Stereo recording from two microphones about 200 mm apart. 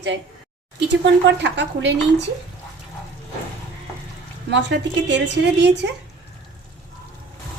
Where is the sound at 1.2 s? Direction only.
60° right (ahead or behind).